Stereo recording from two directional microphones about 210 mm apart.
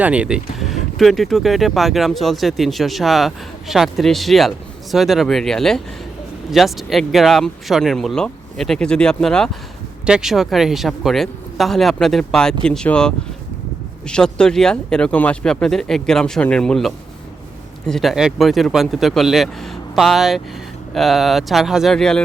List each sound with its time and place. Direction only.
0.0 s speech: 5° right (ahead or behind)